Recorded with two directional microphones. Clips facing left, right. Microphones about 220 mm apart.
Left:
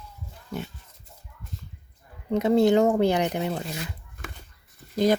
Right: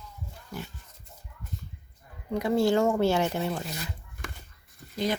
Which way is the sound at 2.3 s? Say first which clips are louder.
Left 5 dB; 20° left (ahead or behind).